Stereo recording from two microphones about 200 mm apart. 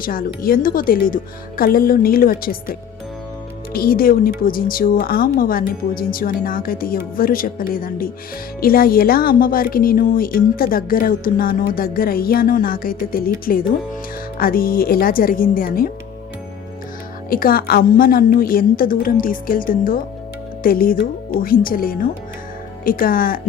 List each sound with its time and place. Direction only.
0.0 s speech: 45° left (ahead or behind)
17.2 s speech: 45° left (ahead or behind)